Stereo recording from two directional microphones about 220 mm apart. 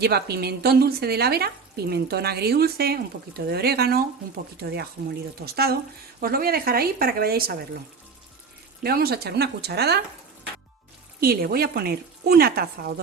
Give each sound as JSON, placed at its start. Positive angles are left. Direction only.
{"t": 0.0, "sound": "speech", "side_deg": -45}
{"t": 8.8, "sound": "speech", "side_deg": -45}
{"t": 11.2, "sound": "speech", "side_deg": -45}